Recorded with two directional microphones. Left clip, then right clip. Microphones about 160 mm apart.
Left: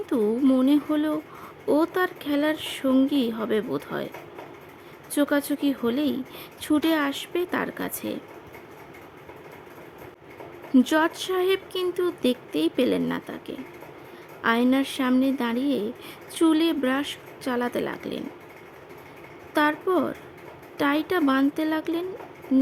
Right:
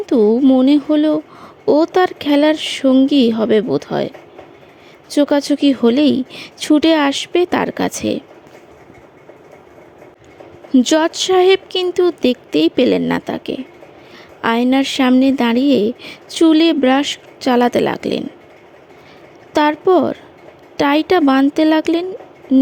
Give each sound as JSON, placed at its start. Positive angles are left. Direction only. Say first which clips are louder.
{"t": 0.3, "sound": "speech", "louder": "right 8 dB", "side_deg": -30}
{"t": 5.1, "sound": "speech", "louder": "right 10 dB", "side_deg": -35}
{"t": 10.8, "sound": "speech", "louder": "right 8 dB", "side_deg": -35}
{"t": 19.5, "sound": "speech", "louder": "right 10 dB", "side_deg": -40}